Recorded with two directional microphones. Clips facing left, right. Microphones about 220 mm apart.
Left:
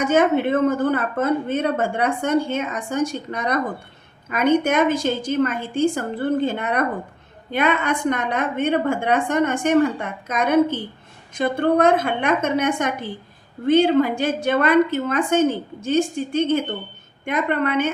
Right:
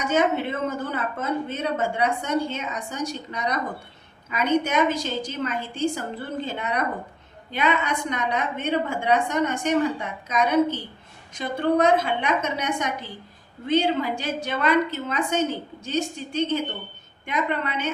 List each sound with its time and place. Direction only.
0.0 s a woman's voice: 50° left (ahead or behind)